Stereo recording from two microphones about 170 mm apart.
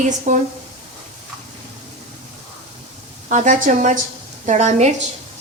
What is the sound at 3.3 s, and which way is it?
A woman's voice, 45° right (ahead or behind).